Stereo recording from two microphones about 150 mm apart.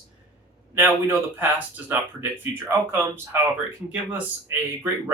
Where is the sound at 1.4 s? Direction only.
10° right (ahead or behind).